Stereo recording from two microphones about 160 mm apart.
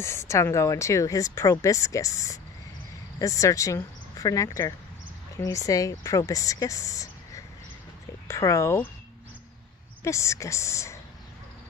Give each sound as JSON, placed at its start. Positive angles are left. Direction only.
{"t": 0.0, "sound": "speech", "side_deg": 15}
{"t": 10.0, "sound": "speech", "side_deg": 20}